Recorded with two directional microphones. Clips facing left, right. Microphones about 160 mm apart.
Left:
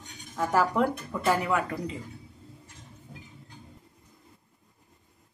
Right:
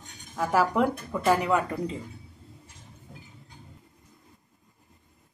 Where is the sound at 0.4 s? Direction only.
10° right (ahead or behind).